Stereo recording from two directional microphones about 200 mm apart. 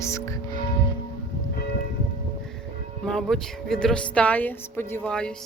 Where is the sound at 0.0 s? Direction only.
15° left (ahead or behind).